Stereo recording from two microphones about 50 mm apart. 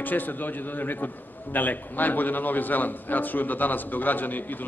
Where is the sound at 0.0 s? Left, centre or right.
Left.